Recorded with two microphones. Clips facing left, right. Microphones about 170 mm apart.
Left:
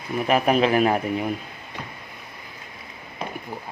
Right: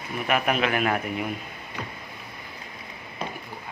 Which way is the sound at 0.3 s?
35° left (ahead or behind).